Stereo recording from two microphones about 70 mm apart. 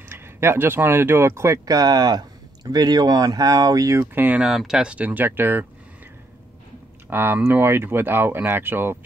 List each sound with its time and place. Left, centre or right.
0.1 s speech: right
1.7 s speech: right
4.0 s speech: right
4.4 s speech: centre; by 5.7 s right
7.1 s speech: right